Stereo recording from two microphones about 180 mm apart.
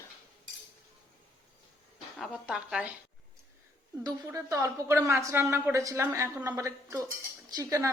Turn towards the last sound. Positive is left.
turn(degrees=-20)  # may be behind; listen again after turning